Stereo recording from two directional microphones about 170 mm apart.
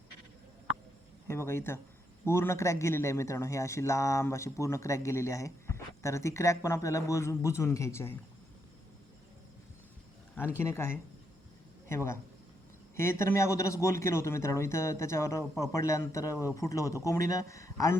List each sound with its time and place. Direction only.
1.3 s speech: 15° left (ahead or behind)
10.3 s speech: 15° left (ahead or behind)